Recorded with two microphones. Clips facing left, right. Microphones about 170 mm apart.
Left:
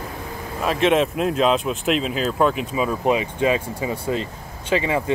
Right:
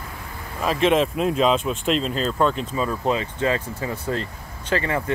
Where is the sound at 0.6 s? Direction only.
Centre (ahead or behind).